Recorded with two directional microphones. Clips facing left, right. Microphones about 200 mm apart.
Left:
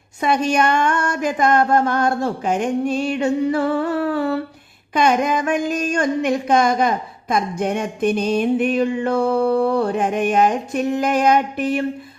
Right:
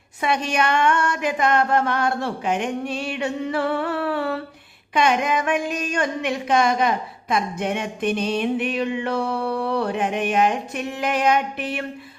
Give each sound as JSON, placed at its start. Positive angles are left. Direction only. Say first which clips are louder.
{"t": 0.2, "sound": "a woman's voice", "louder": "left 4 dB", "side_deg": 40}